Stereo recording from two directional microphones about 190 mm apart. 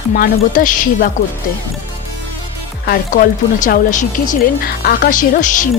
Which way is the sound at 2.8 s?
55° left (ahead or behind).